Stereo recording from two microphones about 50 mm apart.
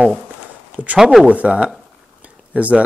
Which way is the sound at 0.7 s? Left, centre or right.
Right.